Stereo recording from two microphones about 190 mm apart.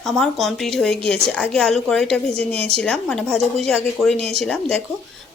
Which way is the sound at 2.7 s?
5° left (ahead or behind).